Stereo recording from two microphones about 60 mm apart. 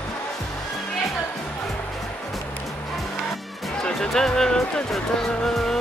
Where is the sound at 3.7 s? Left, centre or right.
Centre.